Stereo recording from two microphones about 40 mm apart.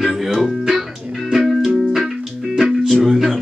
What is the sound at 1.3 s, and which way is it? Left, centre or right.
Music, centre.